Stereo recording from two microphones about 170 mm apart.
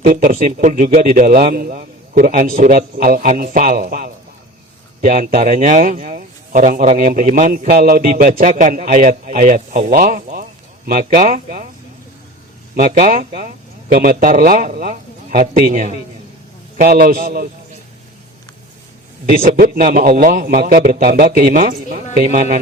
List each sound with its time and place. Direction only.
0.0 s a man's voice: 50° right (ahead or behind)
4.9 s a man's voice: 45° right (ahead or behind)
12.7 s a man's voice: 55° right (ahead or behind)
13.9 s a man's voice: 60° right (ahead or behind)
19.2 s a man's voice: 55° right (ahead or behind)